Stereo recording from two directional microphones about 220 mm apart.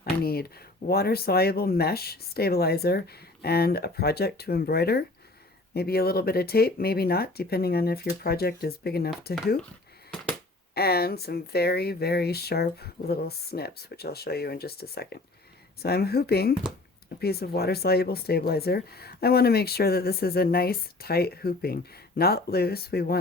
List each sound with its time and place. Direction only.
0.0 s speech: 45° left (ahead or behind)
10.8 s speech: 45° left (ahead or behind)